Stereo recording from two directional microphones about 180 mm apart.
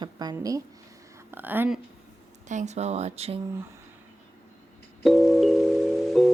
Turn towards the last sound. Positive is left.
turn(degrees=0)  # may be behind; listen again after turning